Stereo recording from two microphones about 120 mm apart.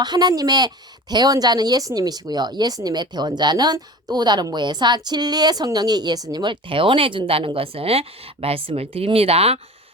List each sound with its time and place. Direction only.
0.0 s speech: 35° right (ahead or behind); by 9.6 s 55° right (ahead or behind)